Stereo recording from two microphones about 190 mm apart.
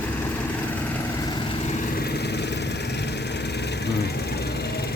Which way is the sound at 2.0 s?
60° left (ahead or behind).